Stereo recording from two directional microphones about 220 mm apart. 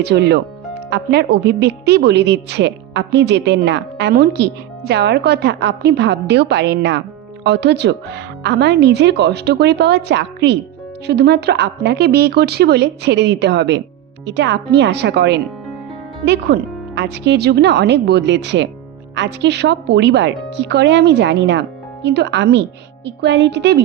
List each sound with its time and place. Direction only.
0.0 s a woman's voice: 50° right (ahead or behind)